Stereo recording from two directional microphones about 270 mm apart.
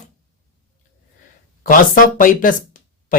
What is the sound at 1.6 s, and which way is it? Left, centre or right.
Speech, left.